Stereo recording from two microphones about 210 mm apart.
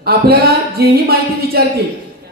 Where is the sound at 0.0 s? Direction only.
45° right (ahead or behind).